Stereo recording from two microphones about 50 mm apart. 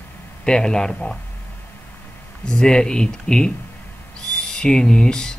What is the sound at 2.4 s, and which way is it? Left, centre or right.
Speech, centre.